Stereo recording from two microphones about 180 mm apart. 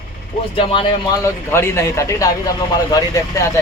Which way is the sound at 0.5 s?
30° left (ahead or behind).